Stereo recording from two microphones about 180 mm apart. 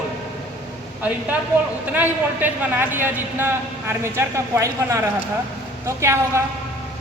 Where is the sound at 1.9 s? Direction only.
10° right (ahead or behind).